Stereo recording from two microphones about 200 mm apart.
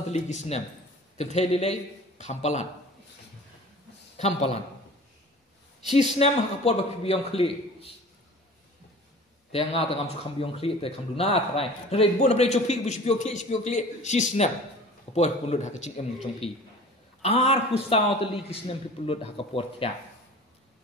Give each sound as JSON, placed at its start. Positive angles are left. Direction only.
{"t": 0.1, "sound": "a man's voice", "side_deg": 35}
{"t": 4.2, "sound": "speech", "side_deg": 30}
{"t": 5.9, "sound": "speech", "side_deg": 35}
{"t": 9.5, "sound": "a man's voice", "side_deg": 30}